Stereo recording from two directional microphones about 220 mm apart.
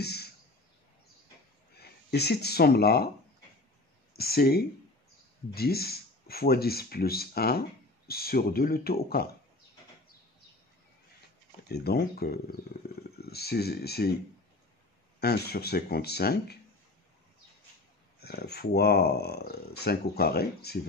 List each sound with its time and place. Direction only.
0.0 s a sound: 45° left (ahead or behind)
1.8 s speech: 50° left (ahead or behind)
4.2 s speech: 45° left (ahead or behind)
11.7 s speech: 45° left (ahead or behind)
15.1 s speech: 45° left (ahead or behind)
18.2 s speech: 45° left (ahead or behind)